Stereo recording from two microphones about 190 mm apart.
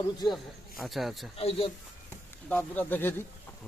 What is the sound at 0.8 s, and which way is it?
Speech, centre (ahead or behind).